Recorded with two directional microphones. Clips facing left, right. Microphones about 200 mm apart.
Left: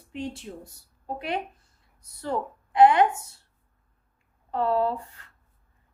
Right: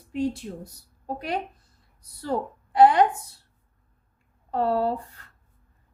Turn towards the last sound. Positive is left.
turn(degrees=-35)  # may be behind; listen again after turning